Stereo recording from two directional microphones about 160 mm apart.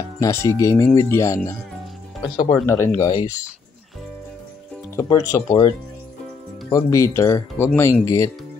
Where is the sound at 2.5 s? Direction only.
15° left (ahead or behind).